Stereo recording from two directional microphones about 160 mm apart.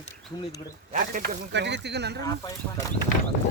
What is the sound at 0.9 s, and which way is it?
Speech, 60° right (ahead or behind).